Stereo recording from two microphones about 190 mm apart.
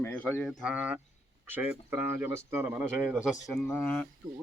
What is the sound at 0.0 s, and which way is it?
Speech, 10° left (ahead or behind).